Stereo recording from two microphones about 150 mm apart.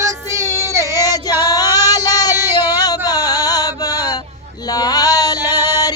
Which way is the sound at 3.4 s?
25° left (ahead or behind).